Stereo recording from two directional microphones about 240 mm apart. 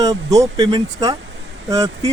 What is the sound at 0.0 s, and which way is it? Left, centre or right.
Speech, centre.